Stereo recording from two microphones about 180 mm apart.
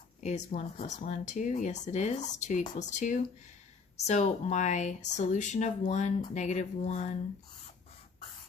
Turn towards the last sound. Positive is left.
turn(degrees=40)  # may be behind; listen again after turning